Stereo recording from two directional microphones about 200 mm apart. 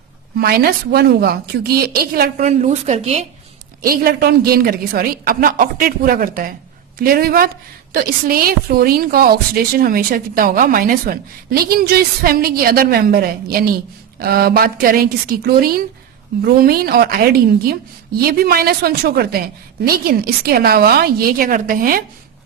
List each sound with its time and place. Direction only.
0.3 s a woman's voice: 50° right (ahead or behind)
2.4 s a woman's voice: 35° right (ahead or behind)
3.8 s a woman's voice: 50° right (ahead or behind)